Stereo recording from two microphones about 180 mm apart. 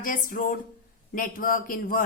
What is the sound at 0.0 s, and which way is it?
Speech, 50° left (ahead or behind).